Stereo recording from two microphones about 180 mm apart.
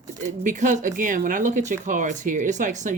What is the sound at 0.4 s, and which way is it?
Speech, 45° right (ahead or behind).